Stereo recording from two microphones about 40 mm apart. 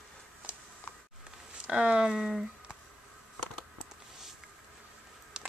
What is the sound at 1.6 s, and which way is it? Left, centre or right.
Speech, right.